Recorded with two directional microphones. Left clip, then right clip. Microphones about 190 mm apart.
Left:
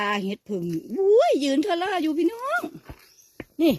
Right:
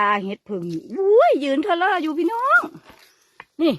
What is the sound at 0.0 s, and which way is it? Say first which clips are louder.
Speech: right 6 dB; 15° left (ahead or behind).